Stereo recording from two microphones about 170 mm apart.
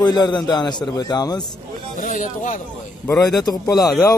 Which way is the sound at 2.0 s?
50° left (ahead or behind).